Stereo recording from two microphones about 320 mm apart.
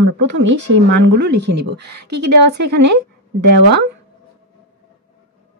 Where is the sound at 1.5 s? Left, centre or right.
Right.